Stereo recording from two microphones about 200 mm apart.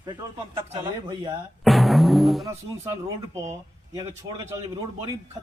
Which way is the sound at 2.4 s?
15° right (ahead or behind).